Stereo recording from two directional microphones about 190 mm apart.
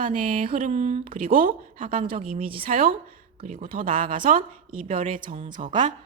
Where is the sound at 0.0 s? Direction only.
45° right (ahead or behind).